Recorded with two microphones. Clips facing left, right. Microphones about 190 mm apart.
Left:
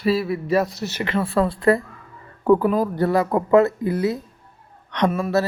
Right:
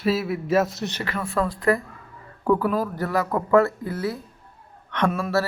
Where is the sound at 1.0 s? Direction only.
30° left (ahead or behind).